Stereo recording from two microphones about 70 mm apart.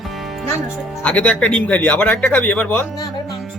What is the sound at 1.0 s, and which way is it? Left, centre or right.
Speech, centre.